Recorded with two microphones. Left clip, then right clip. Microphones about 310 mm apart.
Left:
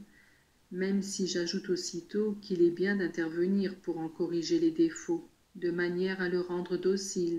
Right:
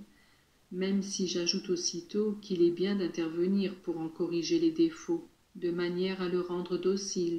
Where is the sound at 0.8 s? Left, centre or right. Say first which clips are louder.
Even; centre.